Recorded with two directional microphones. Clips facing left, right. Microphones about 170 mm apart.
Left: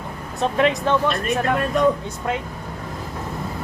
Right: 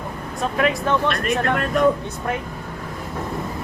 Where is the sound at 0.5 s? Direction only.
25° left (ahead or behind).